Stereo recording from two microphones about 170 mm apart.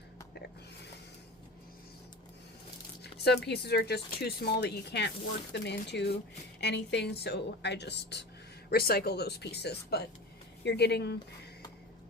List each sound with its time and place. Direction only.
3.0 s speech: 75° left (ahead or behind)
5.5 s a woman's voice: 90° left
8.7 s speech: 65° left (ahead or behind)
10.6 s a woman's voice: 85° left